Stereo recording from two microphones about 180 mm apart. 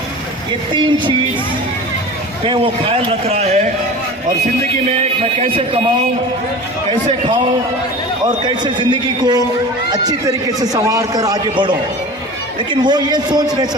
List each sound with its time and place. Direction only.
0.7 s a man's voice: 25° right (ahead or behind)
2.4 s a man's voice: 30° right (ahead or behind)
4.9 s a man's voice: 35° right (ahead or behind)
8.4 s a man's voice: 25° right (ahead or behind)